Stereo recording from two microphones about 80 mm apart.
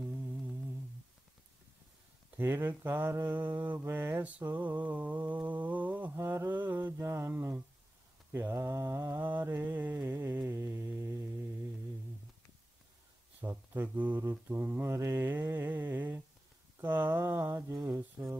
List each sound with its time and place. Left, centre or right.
2.3 s mantra: right
6.1 s speech: right
8.3 s mantra: right
10.0 s a sound: right
13.4 s a sound: right
13.8 s mantra: right
15.0 s speech: right
15.2 s mantra: right
16.8 s speech: right